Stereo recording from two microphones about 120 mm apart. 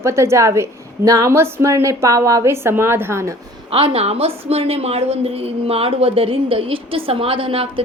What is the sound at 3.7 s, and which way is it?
A woman's voice, 55° right (ahead or behind).